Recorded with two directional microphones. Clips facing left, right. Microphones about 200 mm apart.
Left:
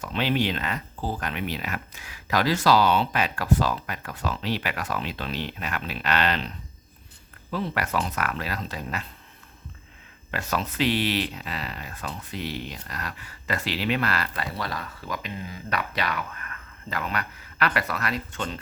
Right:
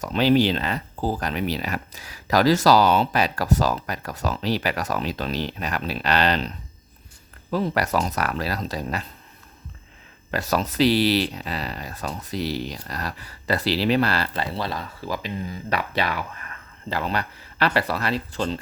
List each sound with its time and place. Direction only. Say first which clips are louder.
0.0 s speech: right 7 dB; 40° right (ahead or behind)
7.5 s speech: right 5 dB; 40° right (ahead or behind)
10.3 s speech: right 5 dB; 40° right (ahead or behind)